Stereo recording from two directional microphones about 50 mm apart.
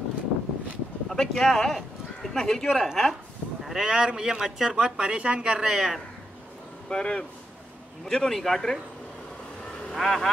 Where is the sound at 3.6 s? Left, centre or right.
Centre.